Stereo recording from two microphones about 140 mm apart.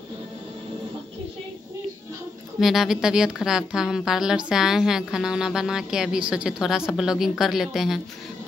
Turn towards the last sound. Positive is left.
turn(degrees=0)  # may be behind; listen again after turning